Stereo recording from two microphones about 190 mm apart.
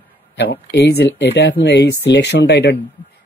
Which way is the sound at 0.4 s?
65° left (ahead or behind).